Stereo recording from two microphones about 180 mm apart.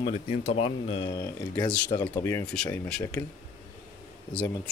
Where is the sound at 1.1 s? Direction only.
15° left (ahead or behind).